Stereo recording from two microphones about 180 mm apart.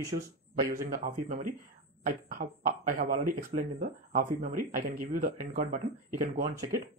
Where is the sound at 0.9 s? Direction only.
50° right (ahead or behind).